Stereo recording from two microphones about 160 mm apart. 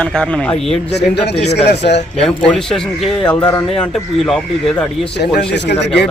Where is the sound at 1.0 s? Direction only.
90° left.